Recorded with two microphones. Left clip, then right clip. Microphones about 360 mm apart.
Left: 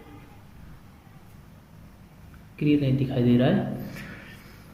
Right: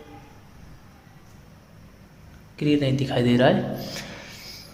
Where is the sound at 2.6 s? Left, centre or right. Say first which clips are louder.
Right 2 dB; centre.